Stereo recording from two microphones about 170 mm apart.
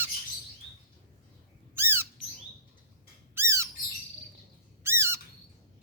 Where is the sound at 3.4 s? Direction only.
15° right (ahead or behind).